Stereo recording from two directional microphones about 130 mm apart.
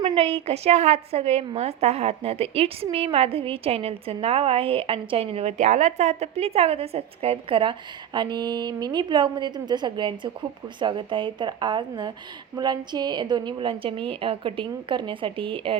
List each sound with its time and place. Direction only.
0.0 s a woman's voice: 40° right (ahead or behind)